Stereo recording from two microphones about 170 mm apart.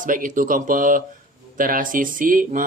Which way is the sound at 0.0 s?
50° right (ahead or behind).